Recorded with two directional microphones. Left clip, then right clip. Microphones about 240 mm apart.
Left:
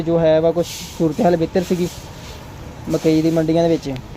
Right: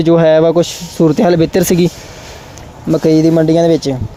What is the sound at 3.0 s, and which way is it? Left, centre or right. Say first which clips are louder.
Speech: right 6 dB; right.